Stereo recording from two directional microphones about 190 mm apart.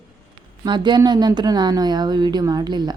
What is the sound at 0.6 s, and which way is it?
A woman's voice, 25° right (ahead or behind).